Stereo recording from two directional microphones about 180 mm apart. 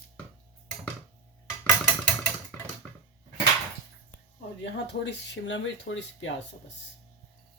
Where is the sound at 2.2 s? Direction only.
10° left (ahead or behind).